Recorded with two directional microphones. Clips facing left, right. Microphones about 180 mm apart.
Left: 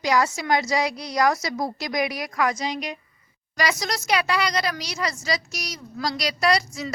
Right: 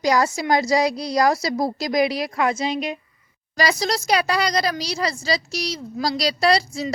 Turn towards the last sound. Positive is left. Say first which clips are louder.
# right 3 dB
turn(degrees=-30)  # may be behind; listen again after turning